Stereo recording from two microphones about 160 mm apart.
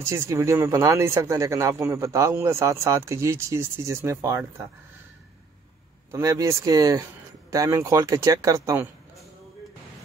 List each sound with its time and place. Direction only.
0.0 s speech: 20° right (ahead or behind)
6.1 s speech: 20° right (ahead or behind)